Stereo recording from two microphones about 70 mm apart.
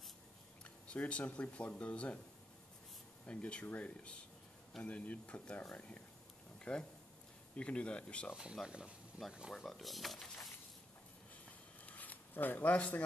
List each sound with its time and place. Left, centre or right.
0.8 s speech: centre
3.3 s speech: centre
8.6 s speech: centre
9.5 s speech: centre
11.8 s zipper: left